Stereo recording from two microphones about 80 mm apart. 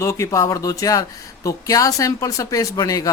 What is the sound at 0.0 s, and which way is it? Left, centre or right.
Speech, left.